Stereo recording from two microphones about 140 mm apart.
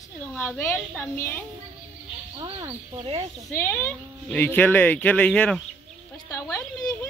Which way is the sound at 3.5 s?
15° left (ahead or behind).